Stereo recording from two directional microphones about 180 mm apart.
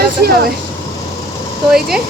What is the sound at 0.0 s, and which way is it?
Speech, 60° right (ahead or behind).